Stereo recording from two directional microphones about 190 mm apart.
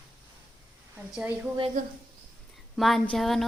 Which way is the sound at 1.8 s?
45° right (ahead or behind).